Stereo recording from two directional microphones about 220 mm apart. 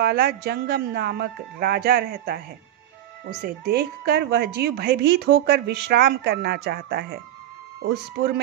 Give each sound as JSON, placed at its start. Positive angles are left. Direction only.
{"t": 0.0, "sound": "a woman's voice", "side_deg": -45}